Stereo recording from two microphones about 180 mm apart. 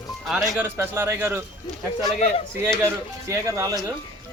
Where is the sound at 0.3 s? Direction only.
Centre (ahead or behind).